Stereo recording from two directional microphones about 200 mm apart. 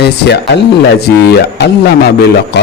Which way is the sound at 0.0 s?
55° left (ahead or behind).